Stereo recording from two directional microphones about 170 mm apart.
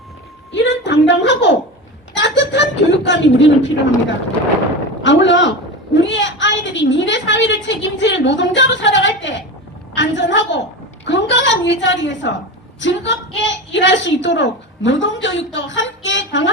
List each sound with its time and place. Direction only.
0.5 s a sound: 90° left
2.1 s speech: 90° left
5.0 s a woman's voice: 90° left